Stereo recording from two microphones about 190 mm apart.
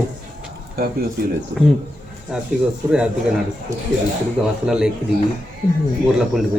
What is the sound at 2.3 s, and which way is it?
Speech, 5° right (ahead or behind).